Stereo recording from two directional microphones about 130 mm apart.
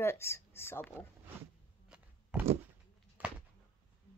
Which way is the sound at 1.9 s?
10° right (ahead or behind).